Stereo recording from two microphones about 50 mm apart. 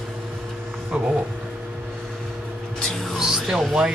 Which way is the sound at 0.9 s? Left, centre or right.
Centre.